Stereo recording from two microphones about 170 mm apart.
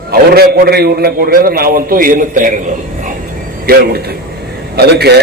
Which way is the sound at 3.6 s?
65° right (ahead or behind).